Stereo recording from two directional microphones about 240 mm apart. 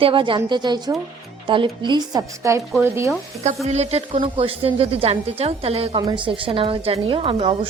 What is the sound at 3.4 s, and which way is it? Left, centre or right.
Speech, right.